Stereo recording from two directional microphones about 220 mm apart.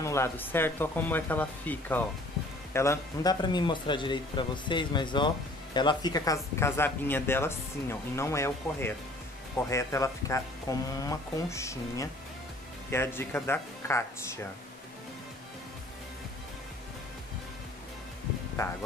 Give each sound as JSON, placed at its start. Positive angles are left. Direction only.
{"t": 0.0, "sound": "speech", "side_deg": 10}